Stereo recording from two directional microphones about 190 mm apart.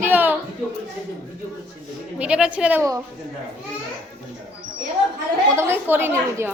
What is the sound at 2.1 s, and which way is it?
Speech, 5° right (ahead or behind).